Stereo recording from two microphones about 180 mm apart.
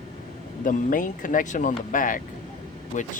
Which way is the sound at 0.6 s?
50° left (ahead or behind).